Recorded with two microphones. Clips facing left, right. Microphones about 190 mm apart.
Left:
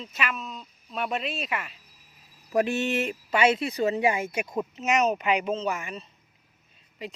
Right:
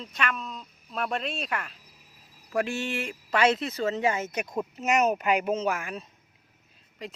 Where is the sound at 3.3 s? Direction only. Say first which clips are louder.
Even; 5° left (ahead or behind).